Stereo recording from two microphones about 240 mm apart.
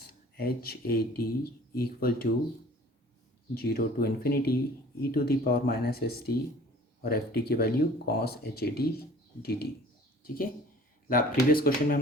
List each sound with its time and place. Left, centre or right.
0.3 s speech: left
3.5 s speech: left
10.2 s speech: left